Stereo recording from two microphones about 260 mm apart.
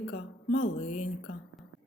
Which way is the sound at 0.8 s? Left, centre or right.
Left.